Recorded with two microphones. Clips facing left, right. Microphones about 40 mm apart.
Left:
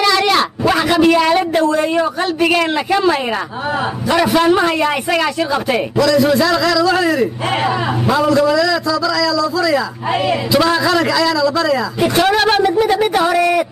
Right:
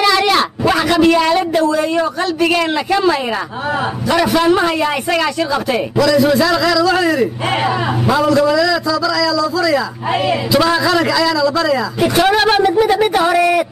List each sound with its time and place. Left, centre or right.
0.0 s a sound: centre
1.3 s speech: left
2.0 s a man's voice: centre